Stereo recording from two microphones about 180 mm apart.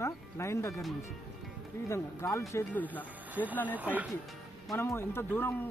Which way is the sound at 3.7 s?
10° right (ahead or behind).